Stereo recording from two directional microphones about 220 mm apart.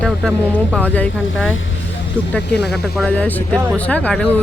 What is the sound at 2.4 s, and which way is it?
Speech, 50° left (ahead or behind).